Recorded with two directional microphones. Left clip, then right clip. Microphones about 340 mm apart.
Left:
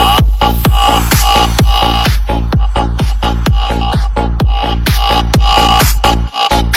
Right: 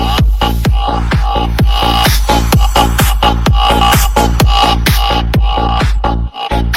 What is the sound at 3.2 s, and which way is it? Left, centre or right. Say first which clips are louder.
Music: right 4 dB; centre.